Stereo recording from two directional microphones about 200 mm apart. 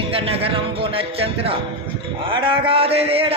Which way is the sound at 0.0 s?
30° right (ahead or behind).